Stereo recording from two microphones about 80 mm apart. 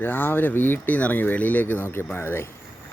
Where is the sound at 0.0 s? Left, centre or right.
Left.